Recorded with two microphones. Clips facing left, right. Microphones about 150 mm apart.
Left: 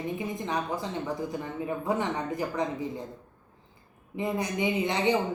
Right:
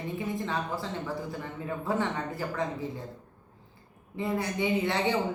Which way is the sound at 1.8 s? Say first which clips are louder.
Even; 15° left (ahead or behind).